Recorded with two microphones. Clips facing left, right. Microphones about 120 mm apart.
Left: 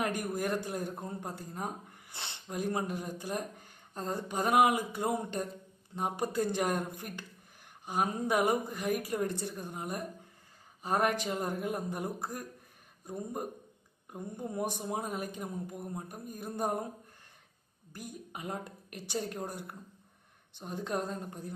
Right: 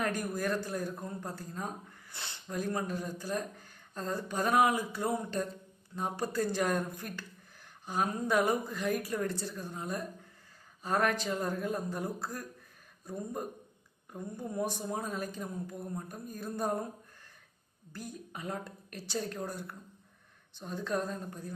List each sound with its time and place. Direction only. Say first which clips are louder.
0.0 s a man's voice: even; 20° left (ahead or behind)
17.9 s a man's voice: right 1 dB; 15° left (ahead or behind)